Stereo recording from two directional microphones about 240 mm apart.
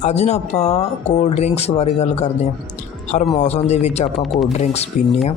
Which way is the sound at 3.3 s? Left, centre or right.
Left.